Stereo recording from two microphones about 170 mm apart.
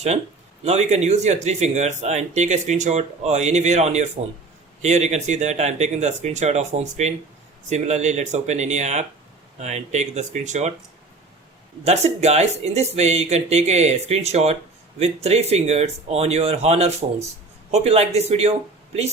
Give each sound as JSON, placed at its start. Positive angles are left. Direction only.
{"t": 0.6, "sound": "speech", "side_deg": -40}
{"t": 11.9, "sound": "speech", "side_deg": -40}